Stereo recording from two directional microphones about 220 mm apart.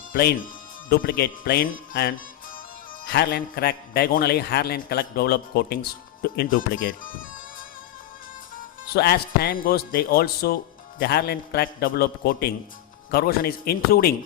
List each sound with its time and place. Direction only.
0.1 s a man's voice: 45° left (ahead or behind)
8.5 s a man's voice: 45° left (ahead or behind)